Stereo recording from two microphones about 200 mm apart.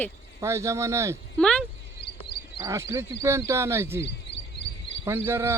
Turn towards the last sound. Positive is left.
turn(degrees=-10)  # may be behind; listen again after turning